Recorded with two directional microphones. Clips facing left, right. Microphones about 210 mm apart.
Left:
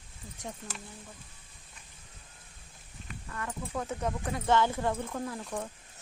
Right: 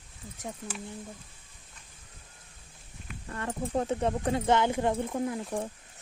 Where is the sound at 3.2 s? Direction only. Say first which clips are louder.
Right 5 dB; 30° right (ahead or behind).